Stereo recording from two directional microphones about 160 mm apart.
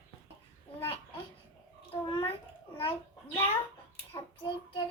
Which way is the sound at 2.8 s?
35° left (ahead or behind).